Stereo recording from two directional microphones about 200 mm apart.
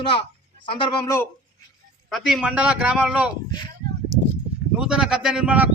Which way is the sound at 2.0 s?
Centre (ahead or behind).